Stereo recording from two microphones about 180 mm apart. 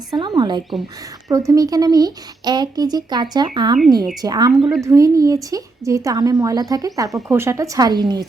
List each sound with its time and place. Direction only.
0.1 s speech: 25° right (ahead or behind)